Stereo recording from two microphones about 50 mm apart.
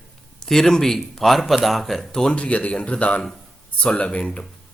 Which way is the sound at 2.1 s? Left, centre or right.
Centre.